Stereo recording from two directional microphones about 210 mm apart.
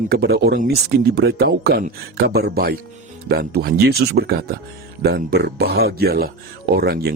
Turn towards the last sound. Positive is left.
turn(degrees=-50)  # may be behind; listen again after turning